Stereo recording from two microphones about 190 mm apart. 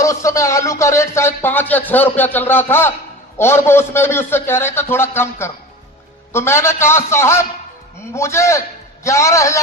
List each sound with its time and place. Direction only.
0.0 s speech: 15° left (ahead or behind)